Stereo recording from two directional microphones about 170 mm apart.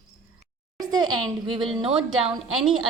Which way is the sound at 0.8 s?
25° right (ahead or behind).